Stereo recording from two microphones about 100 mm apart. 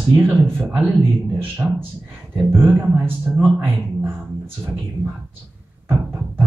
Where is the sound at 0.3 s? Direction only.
20° right (ahead or behind).